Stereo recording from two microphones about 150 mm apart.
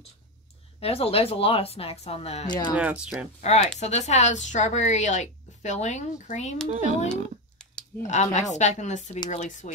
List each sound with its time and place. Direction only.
0.7 s speech: 40° left (ahead or behind)
2.4 s speech: 30° left (ahead or behind)
2.7 s speech: 10° right (ahead or behind)
3.3 s a woman's voice: 50° left (ahead or behind)
6.7 s speech: 55° right (ahead or behind)
8.1 s a woman's voice: 50° left (ahead or behind)